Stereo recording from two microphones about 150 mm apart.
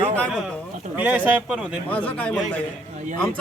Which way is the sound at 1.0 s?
10° right (ahead or behind).